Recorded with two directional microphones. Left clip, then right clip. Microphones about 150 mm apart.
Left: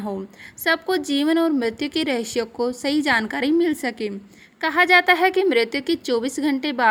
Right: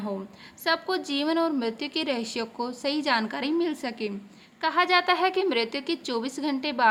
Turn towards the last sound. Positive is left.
turn(degrees=35)  # may be behind; listen again after turning